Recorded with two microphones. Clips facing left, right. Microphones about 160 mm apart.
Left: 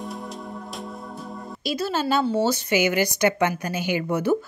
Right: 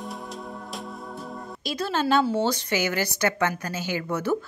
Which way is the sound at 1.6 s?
10° left (ahead or behind).